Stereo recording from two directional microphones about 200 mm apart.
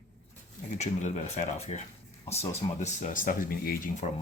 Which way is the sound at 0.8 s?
35° left (ahead or behind).